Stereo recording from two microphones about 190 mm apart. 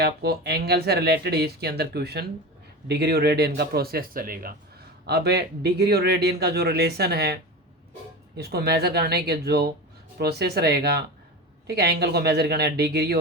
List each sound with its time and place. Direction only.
0.0 s a man's voice: 60° right (ahead or behind)
5.0 s a man's voice: 60° right (ahead or behind)
8.4 s a man's voice: 60° right (ahead or behind)